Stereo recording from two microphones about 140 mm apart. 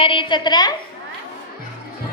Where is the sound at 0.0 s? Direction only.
40° left (ahead or behind).